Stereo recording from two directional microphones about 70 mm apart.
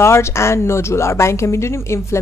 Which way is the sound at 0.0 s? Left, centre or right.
Left.